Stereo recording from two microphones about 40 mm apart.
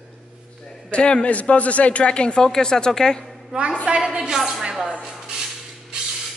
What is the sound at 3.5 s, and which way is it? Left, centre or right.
Speech, right.